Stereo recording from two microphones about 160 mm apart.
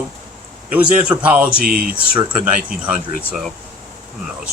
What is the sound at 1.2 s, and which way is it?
Speech, 10° right (ahead or behind).